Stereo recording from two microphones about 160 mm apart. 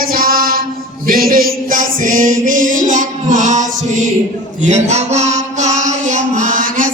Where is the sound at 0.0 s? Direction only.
65° right (ahead or behind).